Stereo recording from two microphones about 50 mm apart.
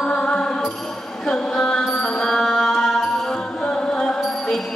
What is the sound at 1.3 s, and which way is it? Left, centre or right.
Mantra, centre.